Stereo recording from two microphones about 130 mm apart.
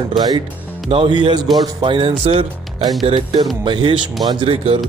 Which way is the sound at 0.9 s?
40° right (ahead or behind).